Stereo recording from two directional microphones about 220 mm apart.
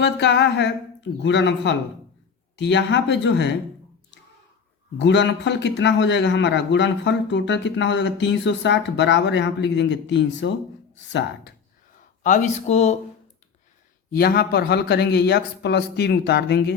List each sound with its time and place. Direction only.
0.0 s a man's voice: 50° left (ahead or behind)
4.9 s a man's voice: 55° left (ahead or behind)
12.2 s speech: 35° left (ahead or behind)
14.1 s a man's voice: 45° left (ahead or behind)